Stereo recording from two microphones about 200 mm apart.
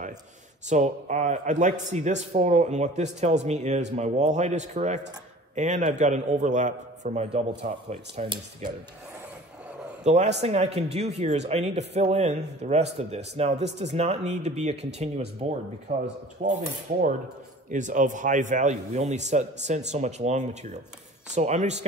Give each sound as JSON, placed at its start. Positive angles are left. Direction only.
{"t": 0.7, "sound": "a man's voice", "side_deg": -35}
{"t": 10.0, "sound": "a man's voice", "side_deg": -35}
{"t": 17.6, "sound": "a man's voice", "side_deg": -40}